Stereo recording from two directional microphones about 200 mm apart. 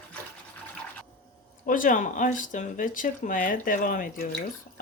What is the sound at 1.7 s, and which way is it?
Speech, 40° left (ahead or behind).